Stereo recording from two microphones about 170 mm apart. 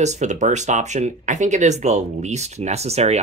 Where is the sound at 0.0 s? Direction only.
45° right (ahead or behind).